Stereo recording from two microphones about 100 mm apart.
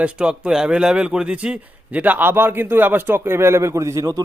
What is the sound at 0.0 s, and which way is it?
Speech, 10° right (ahead or behind).